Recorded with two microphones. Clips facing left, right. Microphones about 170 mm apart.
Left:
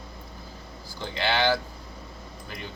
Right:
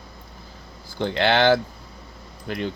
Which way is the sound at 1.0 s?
60° right (ahead or behind).